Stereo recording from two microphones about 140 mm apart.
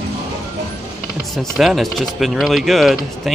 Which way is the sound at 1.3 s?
Centre (ahead or behind).